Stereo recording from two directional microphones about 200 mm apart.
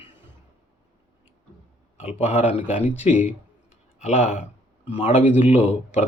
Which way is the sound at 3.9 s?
35° left (ahead or behind).